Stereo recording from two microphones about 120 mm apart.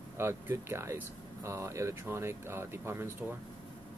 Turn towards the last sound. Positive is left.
turn(degrees=-20)  # may be behind; listen again after turning